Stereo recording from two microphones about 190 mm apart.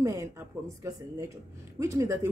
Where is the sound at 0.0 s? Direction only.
15° right (ahead or behind).